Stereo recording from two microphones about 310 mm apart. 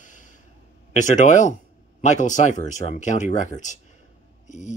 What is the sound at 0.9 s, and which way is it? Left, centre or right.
Speech, left.